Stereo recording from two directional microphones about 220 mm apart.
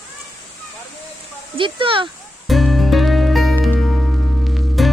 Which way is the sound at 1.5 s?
25° right (ahead or behind).